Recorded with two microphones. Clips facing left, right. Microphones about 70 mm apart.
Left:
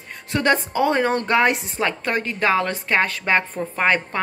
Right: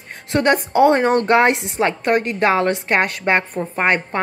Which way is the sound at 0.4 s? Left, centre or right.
Right.